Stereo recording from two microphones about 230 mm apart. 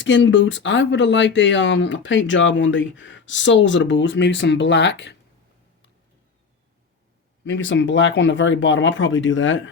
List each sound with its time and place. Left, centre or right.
0.0 s speech: left
7.4 s speech: left